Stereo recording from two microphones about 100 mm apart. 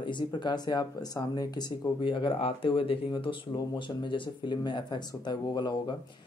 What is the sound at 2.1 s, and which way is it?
Speech, 60° left (ahead or behind).